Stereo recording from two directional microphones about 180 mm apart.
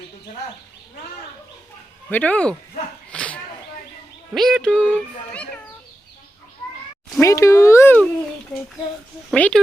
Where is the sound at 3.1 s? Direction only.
5° left (ahead or behind).